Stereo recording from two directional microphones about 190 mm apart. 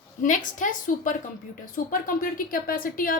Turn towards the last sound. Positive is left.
turn(degrees=50)  # may be behind; listen again after turning